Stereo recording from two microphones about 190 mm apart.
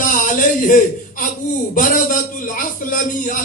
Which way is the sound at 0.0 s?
45° left (ahead or behind).